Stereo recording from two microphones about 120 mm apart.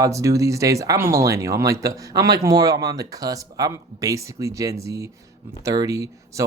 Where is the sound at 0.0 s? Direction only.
25° right (ahead or behind).